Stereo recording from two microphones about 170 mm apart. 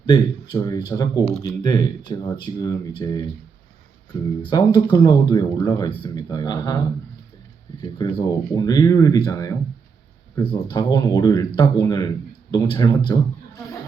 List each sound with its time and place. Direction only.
0.0 s speech: 25° left (ahead or behind)
4.4 s speech: 25° left (ahead or behind)